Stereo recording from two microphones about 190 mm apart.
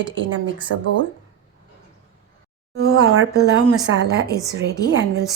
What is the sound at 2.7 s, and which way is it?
Speech, 75° right (ahead or behind).